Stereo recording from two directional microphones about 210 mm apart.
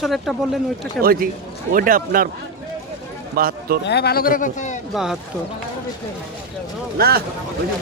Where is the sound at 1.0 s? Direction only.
45° right (ahead or behind).